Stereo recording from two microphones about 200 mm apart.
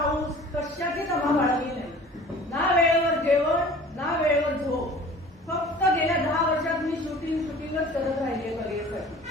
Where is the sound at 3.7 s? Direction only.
Centre (ahead or behind).